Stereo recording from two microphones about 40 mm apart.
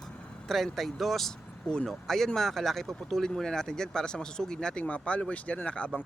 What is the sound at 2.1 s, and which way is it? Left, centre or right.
Speech, centre.